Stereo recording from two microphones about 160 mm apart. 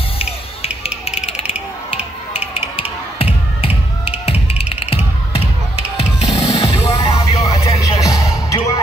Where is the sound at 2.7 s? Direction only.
35° left (ahead or behind).